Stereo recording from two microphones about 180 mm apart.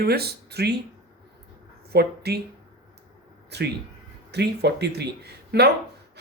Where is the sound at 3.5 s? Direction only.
70° right (ahead or behind).